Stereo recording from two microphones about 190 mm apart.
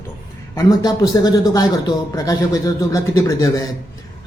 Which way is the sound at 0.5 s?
20° left (ahead or behind).